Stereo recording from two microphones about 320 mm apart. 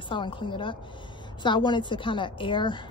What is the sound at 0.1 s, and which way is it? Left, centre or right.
A woman's voice, centre.